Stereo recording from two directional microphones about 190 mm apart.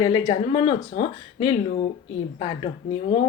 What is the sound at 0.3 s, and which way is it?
Speech, 35° left (ahead or behind).